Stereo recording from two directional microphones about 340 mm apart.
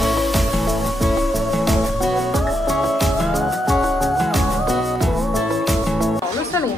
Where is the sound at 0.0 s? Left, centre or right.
Centre.